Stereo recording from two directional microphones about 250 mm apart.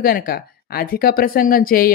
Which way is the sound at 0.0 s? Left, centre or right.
Left.